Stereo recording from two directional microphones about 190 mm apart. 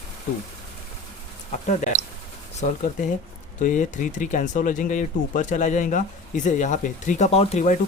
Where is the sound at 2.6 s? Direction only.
40° left (ahead or behind).